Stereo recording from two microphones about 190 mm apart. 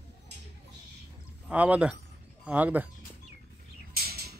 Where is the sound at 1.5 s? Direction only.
10° right (ahead or behind).